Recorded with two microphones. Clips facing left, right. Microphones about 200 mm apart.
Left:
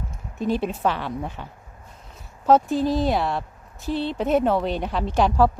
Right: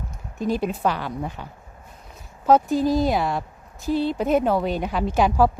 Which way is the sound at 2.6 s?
45° right (ahead or behind).